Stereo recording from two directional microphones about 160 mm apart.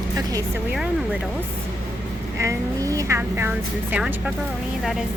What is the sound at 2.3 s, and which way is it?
Speech, 20° right (ahead or behind).